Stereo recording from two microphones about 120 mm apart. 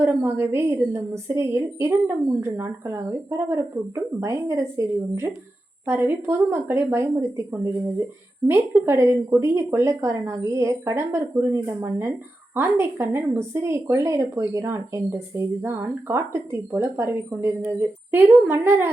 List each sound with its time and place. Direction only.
0.0 s speech: 20° right (ahead or behind)
8.4 s speech: 20° right (ahead or behind)